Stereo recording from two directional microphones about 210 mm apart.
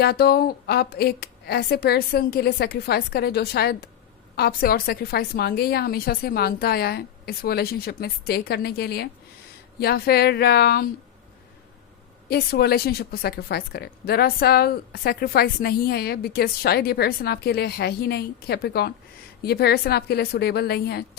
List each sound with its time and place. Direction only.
0.0 s a woman's voice: 50° left (ahead or behind)
12.3 s a woman's voice: 50° left (ahead or behind)